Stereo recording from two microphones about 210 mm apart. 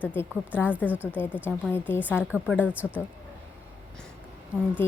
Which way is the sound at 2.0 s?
5° right (ahead or behind).